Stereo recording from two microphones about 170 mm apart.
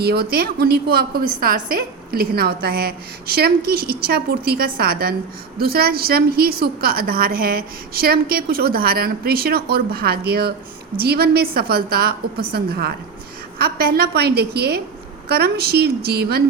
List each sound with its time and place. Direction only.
0.0 s a woman's voice: 65° right (ahead or behind)